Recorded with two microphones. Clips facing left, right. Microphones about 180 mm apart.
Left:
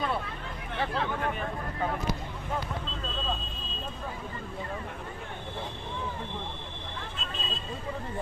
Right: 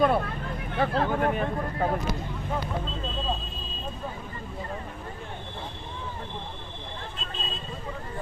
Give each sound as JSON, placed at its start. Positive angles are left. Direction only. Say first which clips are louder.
{"t": 0.0, "sound": "vehicle", "louder": "right 9 dB", "side_deg": -55}
{"t": 0.8, "sound": "speech", "louder": "right 6 dB", "side_deg": -45}